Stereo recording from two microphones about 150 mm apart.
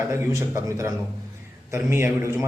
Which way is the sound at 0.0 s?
20° right (ahead or behind).